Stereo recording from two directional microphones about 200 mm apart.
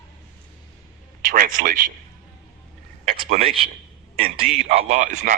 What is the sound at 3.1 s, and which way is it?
Speech, 35° right (ahead or behind).